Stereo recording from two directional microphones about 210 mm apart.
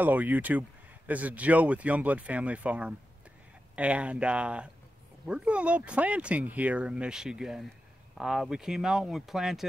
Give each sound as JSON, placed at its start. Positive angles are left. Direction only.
{"t": 0.0, "sound": "speech", "side_deg": -10}